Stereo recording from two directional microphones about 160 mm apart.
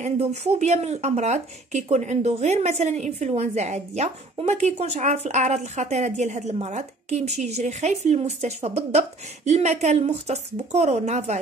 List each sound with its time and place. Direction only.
0.0 s speech: 45° right (ahead or behind)